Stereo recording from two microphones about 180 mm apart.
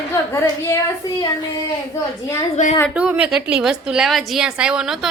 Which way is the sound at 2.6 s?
40° left (ahead or behind).